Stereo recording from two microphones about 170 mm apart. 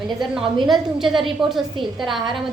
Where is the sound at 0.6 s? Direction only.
Centre (ahead or behind).